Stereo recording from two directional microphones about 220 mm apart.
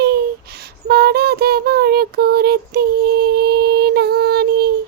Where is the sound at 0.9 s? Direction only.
45° right (ahead or behind).